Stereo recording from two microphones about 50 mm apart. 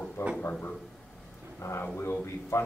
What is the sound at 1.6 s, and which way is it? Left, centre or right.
A man's voice, left.